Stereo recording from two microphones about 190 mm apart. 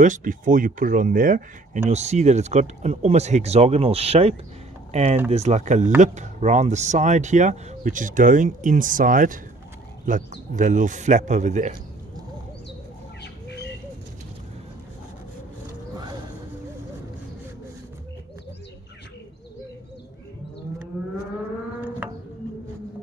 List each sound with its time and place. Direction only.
0.0 s speech: 45° right (ahead or behind)
13.2 s bird: 60° left (ahead or behind)
15.9 s a sound: 20° right (ahead or behind)